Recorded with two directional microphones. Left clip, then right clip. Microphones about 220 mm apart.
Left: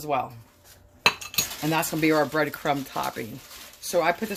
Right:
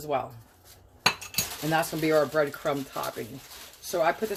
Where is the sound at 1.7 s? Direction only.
50° left (ahead or behind).